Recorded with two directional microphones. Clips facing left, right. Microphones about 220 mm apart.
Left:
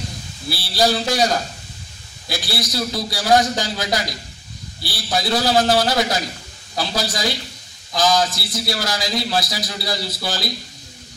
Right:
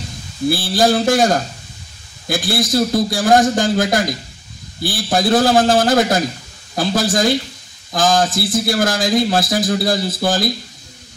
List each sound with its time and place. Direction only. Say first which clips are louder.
0.5 s a man's voice: right 5 dB; 50° right (ahead or behind)